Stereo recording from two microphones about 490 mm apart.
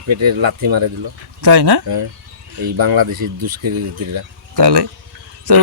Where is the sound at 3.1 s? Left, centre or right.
Right.